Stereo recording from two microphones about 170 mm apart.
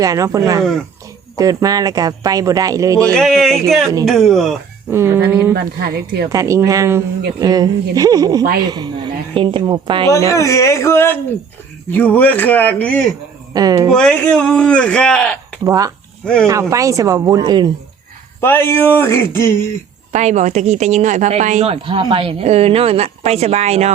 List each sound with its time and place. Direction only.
0.0 s speech: 20° right (ahead or behind)
3.1 s a man's voice: centre (ahead or behind)
4.9 s speech: 15° right (ahead or behind)
10.3 s speech: 20° left (ahead or behind)
13.5 s speech: 20° right (ahead or behind)
13.9 s a man's voice: 5° left (ahead or behind)
15.6 s speech: 20° right (ahead or behind)
16.2 s a man's voice: 5° left (ahead or behind)
16.5 s speech: 15° right (ahead or behind)
18.3 s speech: 15° left (ahead or behind)
20.1 s speech: 45° right (ahead or behind)